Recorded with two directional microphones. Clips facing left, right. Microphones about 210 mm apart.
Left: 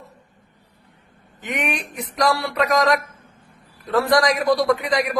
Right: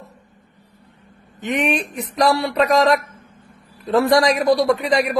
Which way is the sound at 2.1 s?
25° right (ahead or behind).